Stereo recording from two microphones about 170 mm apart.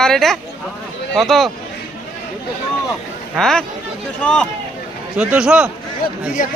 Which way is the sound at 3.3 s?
5° left (ahead or behind).